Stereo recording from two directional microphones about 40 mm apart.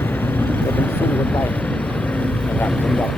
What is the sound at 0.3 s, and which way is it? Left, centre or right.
Vehicle, left.